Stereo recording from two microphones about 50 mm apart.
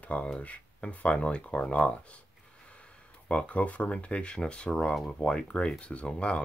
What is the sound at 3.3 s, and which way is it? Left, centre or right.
Speech, left.